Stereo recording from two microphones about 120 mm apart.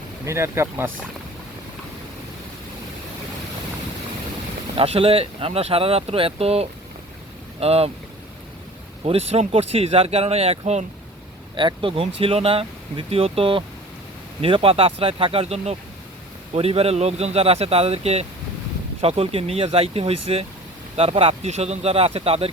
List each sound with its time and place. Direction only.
0.3 s speech: 20° right (ahead or behind)
4.7 s speech: 50° right (ahead or behind)
9.0 s speech: 60° right (ahead or behind)
11.5 s speech: 45° right (ahead or behind)
21.4 s speech: 65° right (ahead or behind)